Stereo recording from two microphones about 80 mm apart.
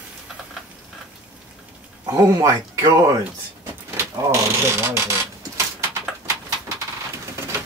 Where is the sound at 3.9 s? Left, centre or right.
Right.